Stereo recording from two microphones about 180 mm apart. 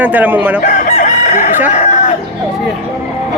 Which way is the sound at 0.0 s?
10° right (ahead or behind).